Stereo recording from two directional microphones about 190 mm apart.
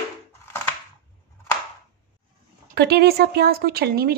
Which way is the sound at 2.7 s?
55° right (ahead or behind).